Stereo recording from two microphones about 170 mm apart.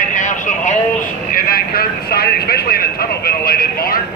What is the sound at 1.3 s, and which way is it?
Speech, 60° left (ahead or behind).